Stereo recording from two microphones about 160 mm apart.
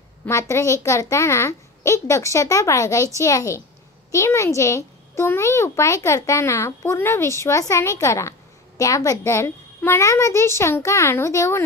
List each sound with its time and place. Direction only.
0.2 s a child's voice: 20° left (ahead or behind)